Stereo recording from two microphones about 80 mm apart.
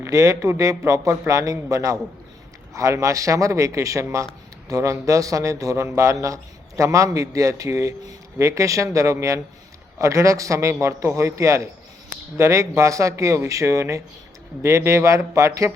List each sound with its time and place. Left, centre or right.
0.0 s a man's voice: right